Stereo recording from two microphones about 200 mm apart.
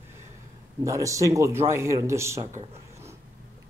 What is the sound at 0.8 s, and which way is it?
Speech, 15° right (ahead or behind).